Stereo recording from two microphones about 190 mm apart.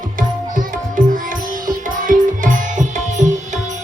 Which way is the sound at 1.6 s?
45° right (ahead or behind).